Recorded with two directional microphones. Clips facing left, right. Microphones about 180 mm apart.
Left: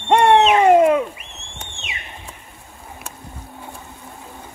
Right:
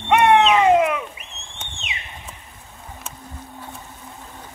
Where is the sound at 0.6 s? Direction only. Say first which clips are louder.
Left 4 dB; 35° left (ahead or behind).